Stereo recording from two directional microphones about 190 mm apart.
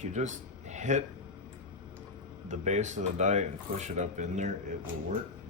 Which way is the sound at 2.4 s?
40° right (ahead or behind).